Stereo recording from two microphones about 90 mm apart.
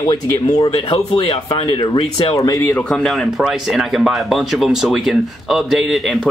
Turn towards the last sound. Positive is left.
turn(degrees=-5)  # may be behind; listen again after turning